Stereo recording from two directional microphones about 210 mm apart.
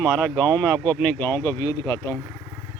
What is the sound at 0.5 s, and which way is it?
Speech, 5° left (ahead or behind).